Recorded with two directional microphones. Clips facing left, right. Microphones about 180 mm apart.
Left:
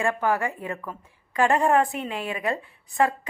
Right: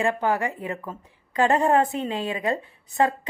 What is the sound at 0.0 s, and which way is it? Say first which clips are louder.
A woman's voice: right 1 dB; 25° right (ahead or behind).